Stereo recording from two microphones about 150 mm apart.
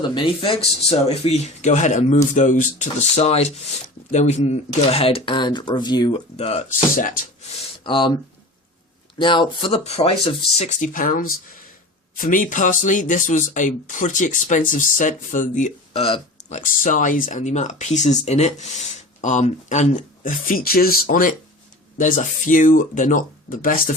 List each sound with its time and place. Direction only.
0.0 s speech: 30° left (ahead or behind)
6.3 s speech: 45° left (ahead or behind)
6.7 s speech: 60° left (ahead or behind)
7.6 s speech: 35° left (ahead or behind); by 16.0 s 55° left (ahead or behind)
16.0 s speech: 40° left (ahead or behind)
16.6 s speech: 60° left (ahead or behind)
21.9 s speech: 55° left (ahead or behind)